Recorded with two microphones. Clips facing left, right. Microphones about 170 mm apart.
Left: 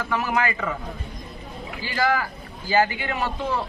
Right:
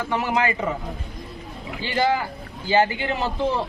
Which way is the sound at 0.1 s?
25° right (ahead or behind).